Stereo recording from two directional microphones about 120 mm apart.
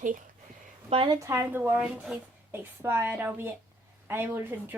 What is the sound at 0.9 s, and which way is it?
Speech, 60° right (ahead or behind).